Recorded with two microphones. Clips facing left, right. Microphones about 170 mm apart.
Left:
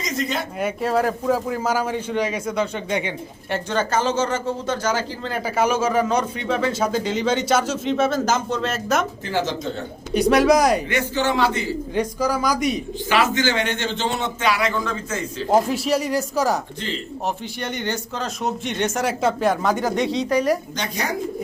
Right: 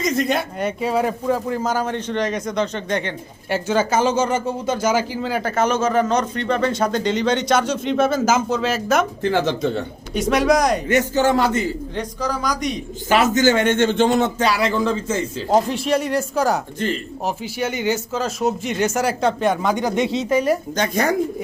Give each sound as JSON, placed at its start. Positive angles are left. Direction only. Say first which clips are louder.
{"t": 0.0, "sound": "speech", "louder": "right 6 dB", "side_deg": -55}
{"t": 0.6, "sound": "a man's voice", "louder": "left 3 dB", "side_deg": 0}
{"t": 3.5, "sound": "speech", "louder": "right 3 dB", "side_deg": -5}
{"t": 5.4, "sound": "speech", "louder": "even", "side_deg": 10}
{"t": 9.3, "sound": "speech", "louder": "right 3 dB", "side_deg": -60}
{"t": 10.2, "sound": "speech", "louder": "left 1 dB", "side_deg": 0}
{"t": 10.8, "sound": "a man's voice", "louder": "right 5 dB", "side_deg": -45}
{"t": 11.9, "sound": "a man's voice", "louder": "left 7 dB", "side_deg": 10}
{"t": 13.1, "sound": "a man's voice", "louder": "right 4 dB", "side_deg": -45}
{"t": 15.4, "sound": "speech", "louder": "even", "side_deg": 5}
{"t": 20.7, "sound": "a man's voice", "louder": "right 7 dB", "side_deg": -50}